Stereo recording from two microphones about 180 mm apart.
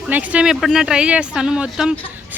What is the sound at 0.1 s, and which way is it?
A woman's voice, 10° right (ahead or behind).